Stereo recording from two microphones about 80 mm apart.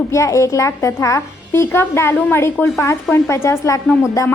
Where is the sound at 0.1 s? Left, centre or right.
Left.